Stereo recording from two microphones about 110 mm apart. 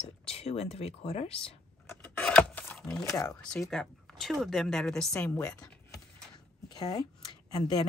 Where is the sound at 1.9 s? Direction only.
15° left (ahead or behind).